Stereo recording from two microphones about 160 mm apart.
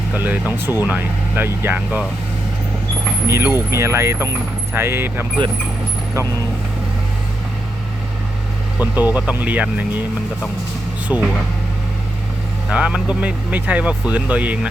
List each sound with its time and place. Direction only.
0.1 s speech: 10° right (ahead or behind)
3.2 s speech: 15° right (ahead or behind)
8.8 s speech: 10° right (ahead or behind)
11.1 s speech: 5° right (ahead or behind)
12.7 s speech: 5° right (ahead or behind)